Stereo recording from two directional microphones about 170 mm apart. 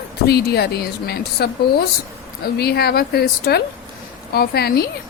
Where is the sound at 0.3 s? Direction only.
70° left (ahead or behind).